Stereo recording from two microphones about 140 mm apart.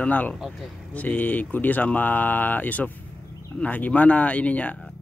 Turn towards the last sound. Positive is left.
turn(degrees=10)  # may be behind; listen again after turning